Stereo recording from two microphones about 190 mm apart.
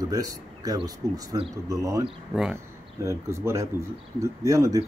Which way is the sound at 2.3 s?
5° right (ahead or behind).